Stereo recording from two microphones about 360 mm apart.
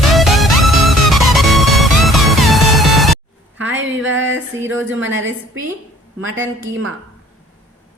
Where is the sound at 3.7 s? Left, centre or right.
Right.